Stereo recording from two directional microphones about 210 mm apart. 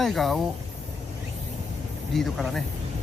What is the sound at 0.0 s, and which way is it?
Speech, centre (ahead or behind).